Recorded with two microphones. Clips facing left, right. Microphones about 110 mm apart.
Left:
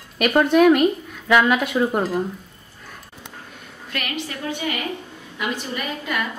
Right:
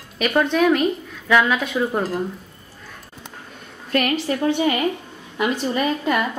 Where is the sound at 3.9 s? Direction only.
35° right (ahead or behind).